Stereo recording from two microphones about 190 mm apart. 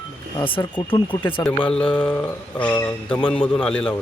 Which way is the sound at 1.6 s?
5° left (ahead or behind).